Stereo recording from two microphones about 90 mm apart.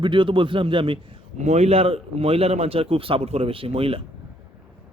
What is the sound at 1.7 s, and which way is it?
A man's voice, 90° right.